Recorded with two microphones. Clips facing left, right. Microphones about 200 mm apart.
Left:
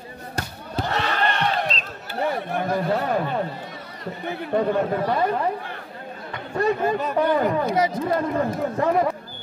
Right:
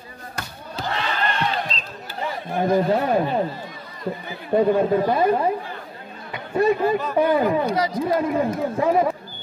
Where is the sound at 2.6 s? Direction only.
20° right (ahead or behind).